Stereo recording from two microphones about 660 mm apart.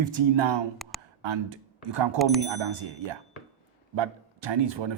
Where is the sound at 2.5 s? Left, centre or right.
Right.